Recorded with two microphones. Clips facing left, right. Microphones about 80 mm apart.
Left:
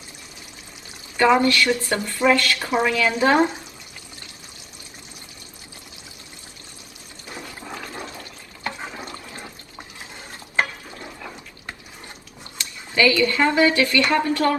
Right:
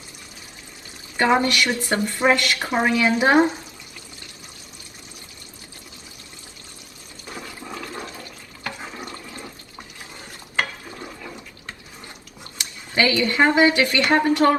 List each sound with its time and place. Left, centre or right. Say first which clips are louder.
1.1 s a woman's voice: left 2 dB; right
7.6 s toilet flush: right 1 dB; centre
12.9 s a woman's voice: left 2 dB; right